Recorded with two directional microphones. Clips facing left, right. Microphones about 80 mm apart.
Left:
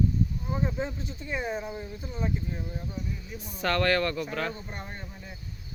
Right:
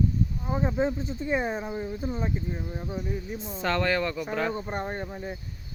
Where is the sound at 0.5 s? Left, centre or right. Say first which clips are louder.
Right 8 dB; right.